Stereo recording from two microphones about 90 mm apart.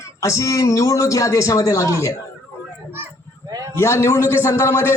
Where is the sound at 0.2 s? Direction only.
35° left (ahead or behind).